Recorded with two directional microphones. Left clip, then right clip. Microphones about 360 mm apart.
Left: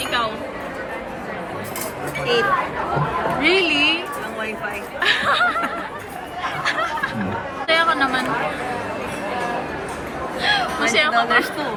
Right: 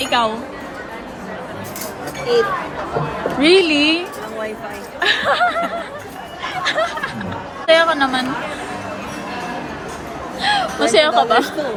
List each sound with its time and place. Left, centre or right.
0.0 s a sound: centre
3.4 s speech: centre
4.9 s snicker: centre
7.7 s speech: centre
10.4 s speech: centre